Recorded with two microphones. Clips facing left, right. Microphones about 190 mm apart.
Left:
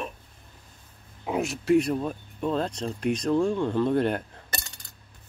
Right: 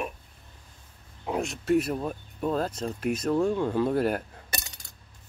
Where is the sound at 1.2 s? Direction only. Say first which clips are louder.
Left 2 dB; centre (ahead or behind).